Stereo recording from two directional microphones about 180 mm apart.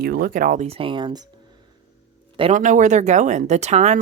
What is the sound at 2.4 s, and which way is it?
Speech, 45° right (ahead or behind).